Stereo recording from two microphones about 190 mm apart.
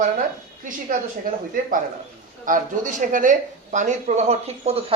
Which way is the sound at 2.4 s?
45° right (ahead or behind).